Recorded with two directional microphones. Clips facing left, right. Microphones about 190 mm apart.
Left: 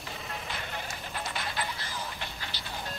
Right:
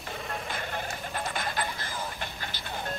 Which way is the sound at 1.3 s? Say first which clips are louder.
Right 3 dB; 50° right (ahead or behind).